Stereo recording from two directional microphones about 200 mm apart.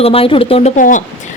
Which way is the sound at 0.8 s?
40° left (ahead or behind).